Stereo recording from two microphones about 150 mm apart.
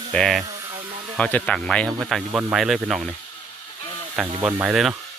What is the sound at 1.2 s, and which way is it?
Speech, 10° left (ahead or behind).